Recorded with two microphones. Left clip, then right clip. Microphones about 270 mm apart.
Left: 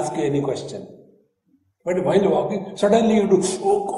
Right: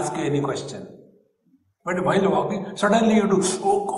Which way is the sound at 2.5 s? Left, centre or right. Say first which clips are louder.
Left 2 dB; left.